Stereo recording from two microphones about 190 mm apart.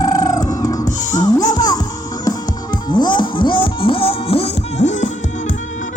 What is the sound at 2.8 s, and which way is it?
Music, 20° left (ahead or behind).